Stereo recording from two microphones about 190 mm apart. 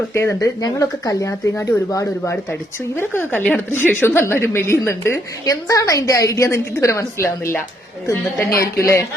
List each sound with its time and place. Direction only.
0.1 s speech: 15° left (ahead or behind)